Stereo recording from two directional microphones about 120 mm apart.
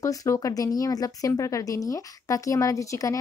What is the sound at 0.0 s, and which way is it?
Speech, 30° left (ahead or behind).